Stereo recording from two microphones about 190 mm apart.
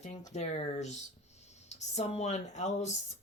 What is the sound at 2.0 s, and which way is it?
Speech, 35° left (ahead or behind).